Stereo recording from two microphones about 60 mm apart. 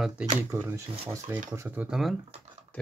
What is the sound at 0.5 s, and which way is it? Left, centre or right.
Speech, right.